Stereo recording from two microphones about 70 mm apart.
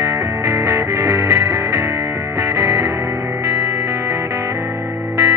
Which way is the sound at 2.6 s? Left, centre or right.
Right.